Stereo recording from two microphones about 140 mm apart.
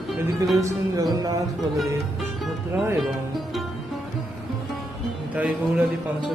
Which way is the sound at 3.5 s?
Centre (ahead or behind).